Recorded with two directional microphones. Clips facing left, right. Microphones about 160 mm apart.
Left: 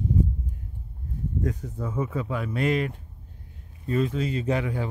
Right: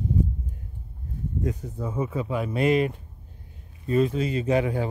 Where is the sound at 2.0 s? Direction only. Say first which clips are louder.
Right 2 dB; 20° right (ahead or behind).